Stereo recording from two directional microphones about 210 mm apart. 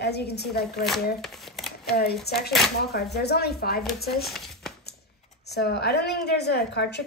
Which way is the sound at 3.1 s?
50° left (ahead or behind).